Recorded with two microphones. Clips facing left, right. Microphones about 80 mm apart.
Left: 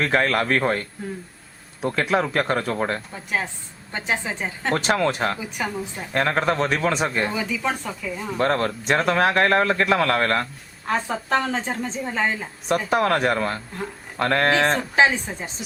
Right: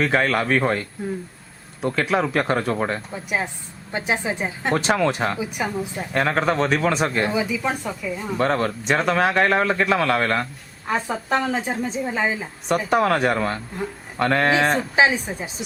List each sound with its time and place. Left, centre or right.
0.0 s speech: centre
3.2 s a woman's voice: centre
4.8 s speech: centre
5.4 s speech: centre
7.3 s a woman's voice: centre